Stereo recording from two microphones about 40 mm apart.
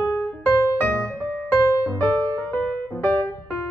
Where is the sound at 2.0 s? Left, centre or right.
Left.